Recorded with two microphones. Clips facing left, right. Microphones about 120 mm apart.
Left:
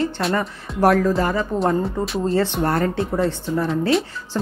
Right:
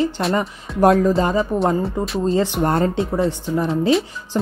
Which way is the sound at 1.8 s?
Centre (ahead or behind).